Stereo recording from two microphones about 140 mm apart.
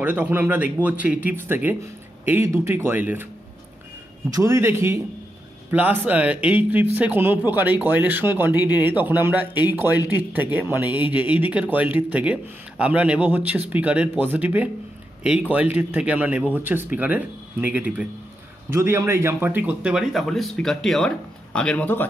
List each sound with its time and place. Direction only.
0.0 s a man's voice: 10° right (ahead or behind)
4.3 s a man's voice: 20° right (ahead or behind); by 22.0 s 10° left (ahead or behind)